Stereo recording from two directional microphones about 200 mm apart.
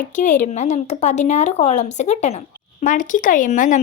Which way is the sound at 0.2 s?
40° left (ahead or behind).